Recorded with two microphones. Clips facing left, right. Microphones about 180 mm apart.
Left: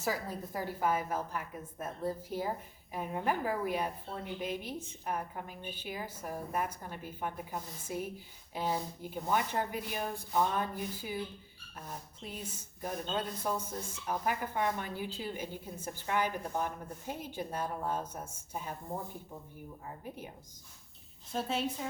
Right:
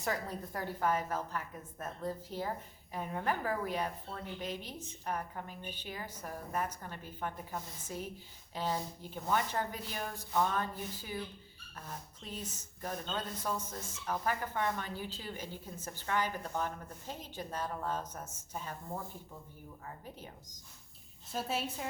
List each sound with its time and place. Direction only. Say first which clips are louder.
0.0 s speech: left 1 dB; 5° left (ahead or behind)
12.2 s speech: even; 10° left (ahead or behind)
21.3 s a woman's voice: left 2 dB; 5° right (ahead or behind)